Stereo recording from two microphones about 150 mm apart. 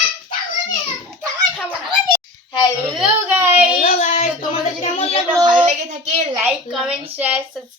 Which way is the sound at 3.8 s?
50° left (ahead or behind).